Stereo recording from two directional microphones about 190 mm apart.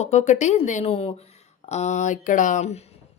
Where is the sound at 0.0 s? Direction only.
35° left (ahead or behind).